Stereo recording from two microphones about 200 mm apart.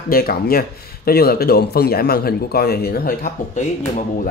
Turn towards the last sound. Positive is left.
turn(degrees=50)  # may be behind; listen again after turning